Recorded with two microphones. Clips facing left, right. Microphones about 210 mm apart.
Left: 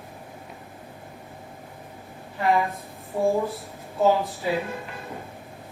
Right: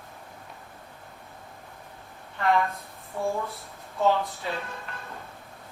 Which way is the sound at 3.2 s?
30° left (ahead or behind).